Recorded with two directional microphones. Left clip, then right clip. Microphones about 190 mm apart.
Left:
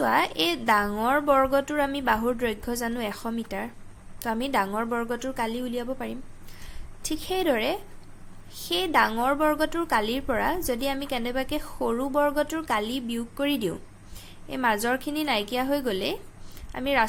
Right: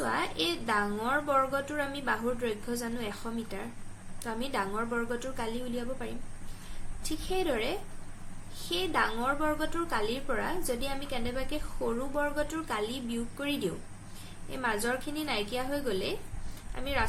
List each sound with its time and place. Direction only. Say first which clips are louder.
0.0 s a woman's voice: left 8 dB; 55° left (ahead or behind)